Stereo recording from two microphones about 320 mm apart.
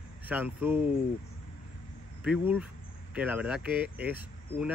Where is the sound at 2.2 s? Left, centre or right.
Centre.